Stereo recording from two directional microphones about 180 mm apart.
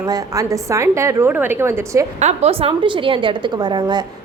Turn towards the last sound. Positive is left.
turn(degrees=-25)  # may be behind; listen again after turning